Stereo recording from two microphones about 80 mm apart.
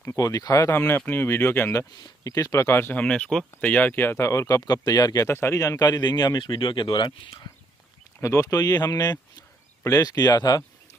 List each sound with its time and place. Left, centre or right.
0.1 s speech: left
0.7 s speech: left
2.2 s speech: left
3.0 s speech: centre
3.7 s speech: left
5.3 s speech: left
5.6 s speech: left
8.2 s speech: left